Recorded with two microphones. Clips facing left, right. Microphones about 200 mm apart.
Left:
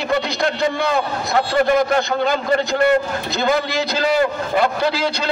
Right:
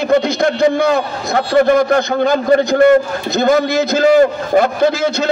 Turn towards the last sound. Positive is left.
turn(degrees=-45)  # may be behind; listen again after turning